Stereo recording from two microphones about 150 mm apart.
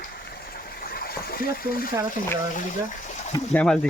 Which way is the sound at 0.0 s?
85° left.